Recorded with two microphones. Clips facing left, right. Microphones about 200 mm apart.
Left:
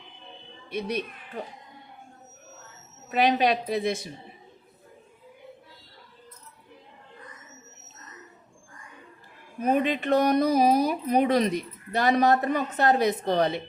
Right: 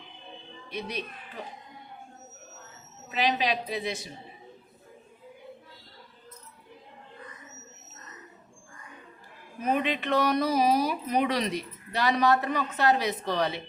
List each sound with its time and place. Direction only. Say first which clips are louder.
0.7 s speech: left 5 dB; 50° left (ahead or behind)
3.1 s speech: left 5 dB; 50° left (ahead or behind)
9.6 s speech: left 4 dB; 45° left (ahead or behind)